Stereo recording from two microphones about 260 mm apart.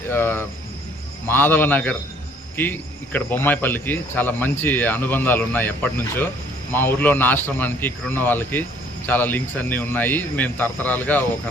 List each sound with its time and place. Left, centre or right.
0.1 s speech: centre